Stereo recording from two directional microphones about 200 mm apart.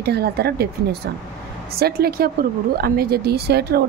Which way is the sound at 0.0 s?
55° right (ahead or behind).